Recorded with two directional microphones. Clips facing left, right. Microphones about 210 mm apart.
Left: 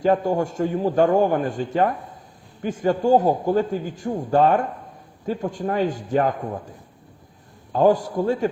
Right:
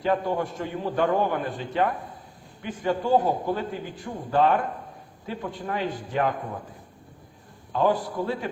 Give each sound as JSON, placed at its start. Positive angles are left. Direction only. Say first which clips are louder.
{"t": 0.0, "sound": "a man's voice", "louder": "left 5 dB", "side_deg": 45}
{"t": 7.7, "sound": "a man's voice", "louder": "left 6 dB", "side_deg": 45}